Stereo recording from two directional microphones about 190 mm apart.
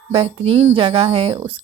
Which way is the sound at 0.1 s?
25° right (ahead or behind).